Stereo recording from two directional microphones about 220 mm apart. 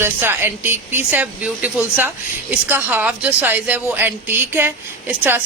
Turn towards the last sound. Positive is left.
turn(degrees=-10)  # may be behind; listen again after turning